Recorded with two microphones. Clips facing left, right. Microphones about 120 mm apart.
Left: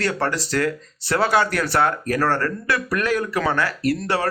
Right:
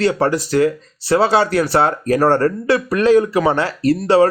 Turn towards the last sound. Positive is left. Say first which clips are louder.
# right 5 dB
turn(degrees=-25)  # may be behind; listen again after turning